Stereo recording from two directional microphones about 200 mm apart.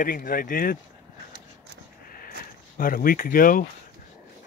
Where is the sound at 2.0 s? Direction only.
45° left (ahead or behind).